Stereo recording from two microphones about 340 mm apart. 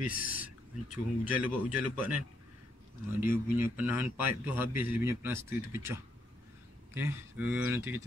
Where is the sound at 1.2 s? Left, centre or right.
Centre.